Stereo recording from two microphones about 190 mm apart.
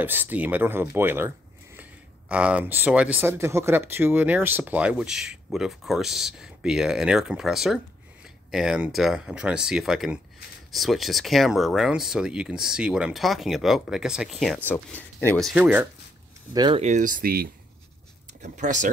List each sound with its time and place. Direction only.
0.0 s speech: 10° right (ahead or behind)
14.7 s speech: 10° left (ahead or behind); by 15.9 s 5° right (ahead or behind)
16.5 s speech: 25° right (ahead or behind)
16.8 s speech: 40° right (ahead or behind)
18.4 s speech: 40° right (ahead or behind)